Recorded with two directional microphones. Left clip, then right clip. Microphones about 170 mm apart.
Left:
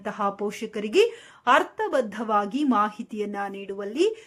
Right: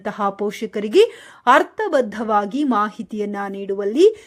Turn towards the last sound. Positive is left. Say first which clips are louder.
# right 10 dB
turn(degrees=-30)  # may be behind; listen again after turning